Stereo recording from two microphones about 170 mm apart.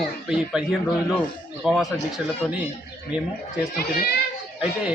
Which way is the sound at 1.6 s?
Centre (ahead or behind).